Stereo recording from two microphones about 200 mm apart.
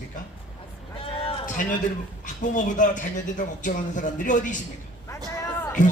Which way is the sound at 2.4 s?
40° left (ahead or behind).